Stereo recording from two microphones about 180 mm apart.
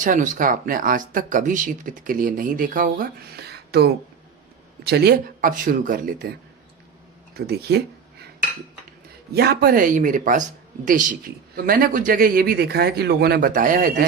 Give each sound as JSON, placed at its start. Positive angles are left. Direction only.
{"t": 0.0, "sound": "speech", "side_deg": -45}
{"t": 7.3, "sound": "speech", "side_deg": -60}
{"t": 9.3, "sound": "speech", "side_deg": -60}
{"t": 11.5, "sound": "speech", "side_deg": -50}